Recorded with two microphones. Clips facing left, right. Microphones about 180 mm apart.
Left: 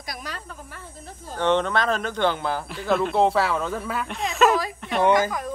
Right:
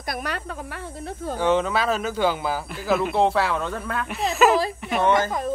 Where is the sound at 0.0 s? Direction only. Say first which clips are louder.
Right 6 dB; 60° right (ahead or behind).